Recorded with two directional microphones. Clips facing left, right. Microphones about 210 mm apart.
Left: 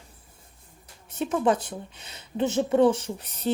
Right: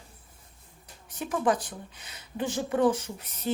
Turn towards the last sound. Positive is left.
turn(degrees=30)  # may be behind; listen again after turning